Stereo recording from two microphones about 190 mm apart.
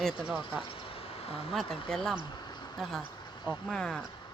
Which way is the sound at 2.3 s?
25° left (ahead or behind).